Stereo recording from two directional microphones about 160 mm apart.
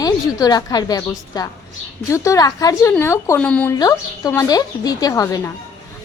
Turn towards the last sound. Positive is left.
turn(degrees=20)  # may be behind; listen again after turning